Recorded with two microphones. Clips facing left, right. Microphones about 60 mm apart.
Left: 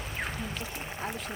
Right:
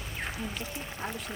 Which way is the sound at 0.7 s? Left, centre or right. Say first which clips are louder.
Left 1 dB; centre.